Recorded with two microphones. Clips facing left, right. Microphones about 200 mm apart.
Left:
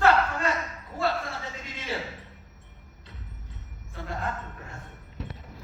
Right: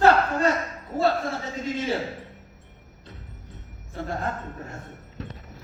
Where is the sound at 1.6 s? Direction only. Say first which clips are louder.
Right 12 dB; 45° right (ahead or behind).